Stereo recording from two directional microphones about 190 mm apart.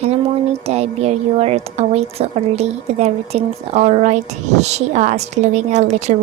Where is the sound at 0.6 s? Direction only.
35° right (ahead or behind).